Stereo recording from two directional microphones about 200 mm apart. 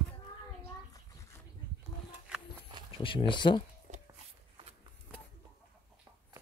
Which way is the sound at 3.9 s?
35° right (ahead or behind).